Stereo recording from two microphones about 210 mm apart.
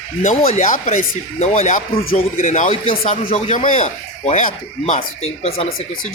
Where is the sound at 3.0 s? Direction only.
40° left (ahead or behind).